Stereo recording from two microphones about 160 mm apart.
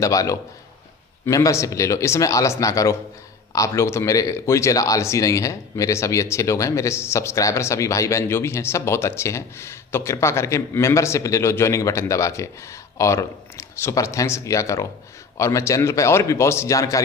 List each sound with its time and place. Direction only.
0.0 s speech: 20° left (ahead or behind)